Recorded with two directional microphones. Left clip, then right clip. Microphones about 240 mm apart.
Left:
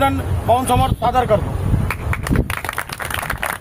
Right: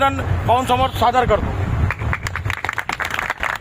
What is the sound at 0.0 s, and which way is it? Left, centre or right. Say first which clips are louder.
Speech: even; centre.